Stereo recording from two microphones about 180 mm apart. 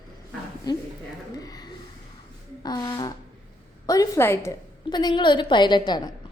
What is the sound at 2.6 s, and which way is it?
A woman's voice, 20° left (ahead or behind).